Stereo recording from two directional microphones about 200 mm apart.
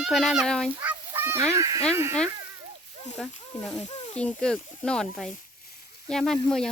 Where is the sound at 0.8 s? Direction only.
10° right (ahead or behind).